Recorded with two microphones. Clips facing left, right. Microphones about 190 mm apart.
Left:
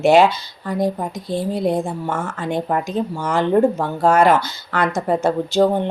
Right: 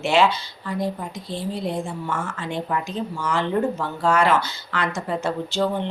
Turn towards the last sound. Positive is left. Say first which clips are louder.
# left 7 dB
turn(degrees=40)  # may be behind; listen again after turning